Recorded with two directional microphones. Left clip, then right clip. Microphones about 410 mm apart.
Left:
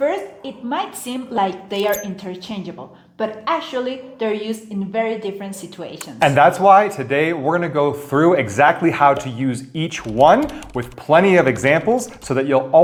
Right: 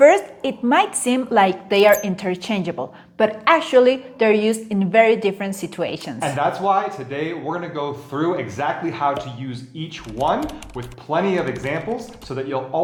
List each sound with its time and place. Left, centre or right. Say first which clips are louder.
0.0 s a woman's voice: right 8 dB; right
6.1 s speech: left 9 dB; left